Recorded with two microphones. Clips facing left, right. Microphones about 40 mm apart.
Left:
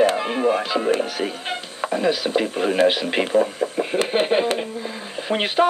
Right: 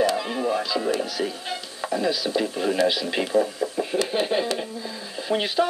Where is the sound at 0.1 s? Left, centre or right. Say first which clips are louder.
Left 4 dB; left.